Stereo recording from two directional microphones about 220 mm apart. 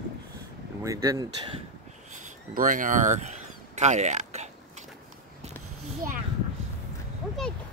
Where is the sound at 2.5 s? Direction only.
35° right (ahead or behind).